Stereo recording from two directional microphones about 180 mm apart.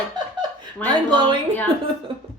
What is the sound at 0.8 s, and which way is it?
Speech, 10° left (ahead or behind).